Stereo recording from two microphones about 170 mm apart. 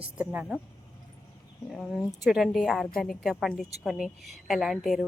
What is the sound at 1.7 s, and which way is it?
A woman's voice, centre (ahead or behind).